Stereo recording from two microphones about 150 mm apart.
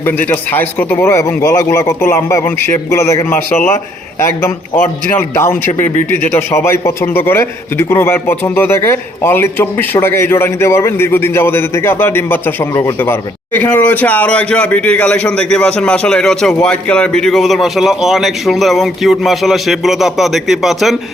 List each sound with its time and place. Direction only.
0.0 s a man's voice: 15° left (ahead or behind)
5.1 s a man's voice: 20° left (ahead or behind); by 20.9 s centre (ahead or behind)